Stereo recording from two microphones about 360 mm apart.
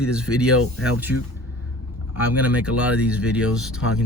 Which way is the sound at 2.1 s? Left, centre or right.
Centre.